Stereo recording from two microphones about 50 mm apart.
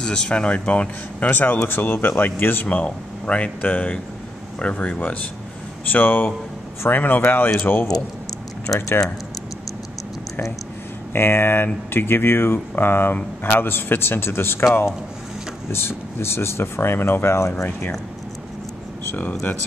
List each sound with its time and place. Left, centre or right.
0.0 s a man's voice: centre
5.9 s a man's voice: left
11.1 s speech: left
15.7 s speech: left